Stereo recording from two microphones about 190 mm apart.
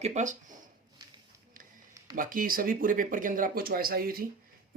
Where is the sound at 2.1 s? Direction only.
45° right (ahead or behind).